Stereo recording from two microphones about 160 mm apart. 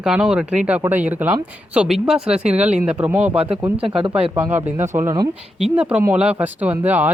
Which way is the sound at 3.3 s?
35° right (ahead or behind).